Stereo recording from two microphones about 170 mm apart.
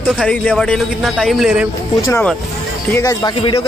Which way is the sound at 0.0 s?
5° left (ahead or behind).